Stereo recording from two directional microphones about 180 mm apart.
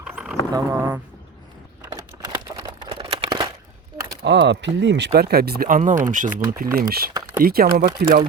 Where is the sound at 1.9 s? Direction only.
25° right (ahead or behind).